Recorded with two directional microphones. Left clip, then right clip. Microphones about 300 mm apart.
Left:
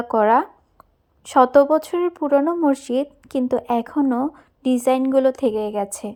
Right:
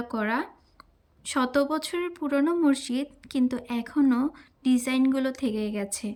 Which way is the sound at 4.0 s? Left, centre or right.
Centre.